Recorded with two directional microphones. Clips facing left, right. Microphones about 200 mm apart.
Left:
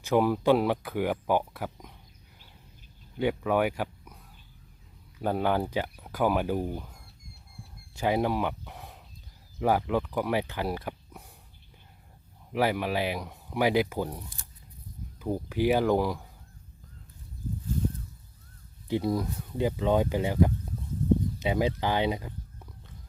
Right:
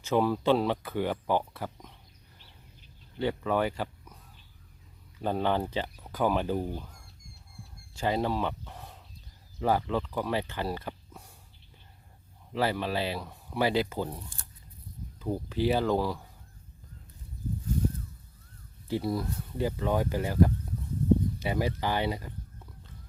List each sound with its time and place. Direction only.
0.0 s speech: 15° left (ahead or behind)
3.2 s speech: 15° left (ahead or behind)
5.2 s speech: 10° left (ahead or behind)
7.9 s speech: 15° left (ahead or behind)
12.5 s speech: 15° left (ahead or behind)
18.9 s speech: 20° left (ahead or behind)